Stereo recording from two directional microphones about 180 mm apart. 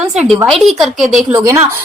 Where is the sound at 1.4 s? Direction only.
15° right (ahead or behind).